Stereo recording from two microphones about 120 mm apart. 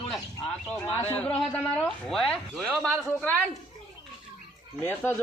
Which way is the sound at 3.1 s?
15° left (ahead or behind).